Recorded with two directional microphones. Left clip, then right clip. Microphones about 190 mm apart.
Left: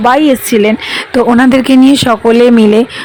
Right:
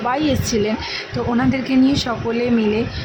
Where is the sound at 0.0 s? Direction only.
35° left (ahead or behind).